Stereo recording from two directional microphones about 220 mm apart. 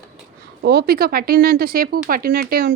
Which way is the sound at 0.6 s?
45° right (ahead or behind).